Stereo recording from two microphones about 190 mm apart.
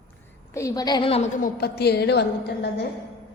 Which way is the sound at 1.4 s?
60° left (ahead or behind).